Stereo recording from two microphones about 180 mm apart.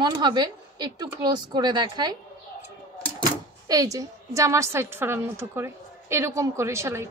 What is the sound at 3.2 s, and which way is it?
Speech, 20° right (ahead or behind).